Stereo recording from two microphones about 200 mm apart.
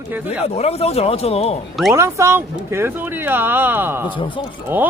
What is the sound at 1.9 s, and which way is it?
Speech, 15° right (ahead or behind).